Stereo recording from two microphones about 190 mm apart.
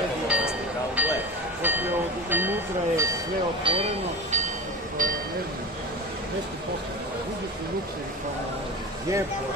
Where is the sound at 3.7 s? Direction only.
30° right (ahead or behind).